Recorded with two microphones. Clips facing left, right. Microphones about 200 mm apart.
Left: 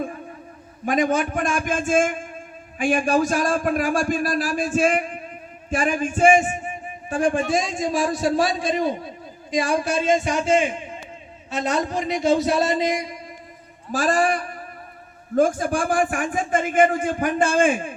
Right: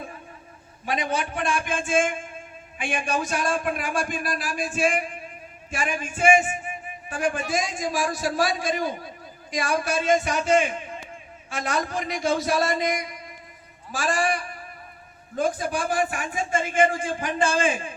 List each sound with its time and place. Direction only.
0.9 s a man's voice: 45° left (ahead or behind)
6.1 s a sound: 40° left (ahead or behind)
7.5 s a man's voice: 30° left (ahead or behind)
13.9 s a man's voice: 40° left (ahead or behind)